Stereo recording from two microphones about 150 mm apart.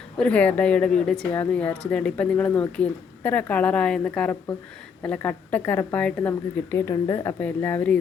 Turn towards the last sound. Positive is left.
turn(degrees=10)  # may be behind; listen again after turning